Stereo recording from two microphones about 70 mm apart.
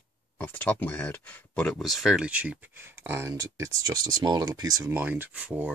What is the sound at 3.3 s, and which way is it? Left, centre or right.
Speech, right.